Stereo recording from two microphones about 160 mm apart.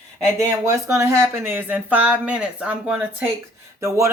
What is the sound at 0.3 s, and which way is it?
Speech, 20° right (ahead or behind).